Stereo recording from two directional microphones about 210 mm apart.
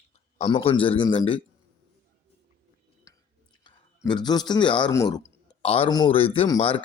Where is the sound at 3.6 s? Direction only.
20° left (ahead or behind).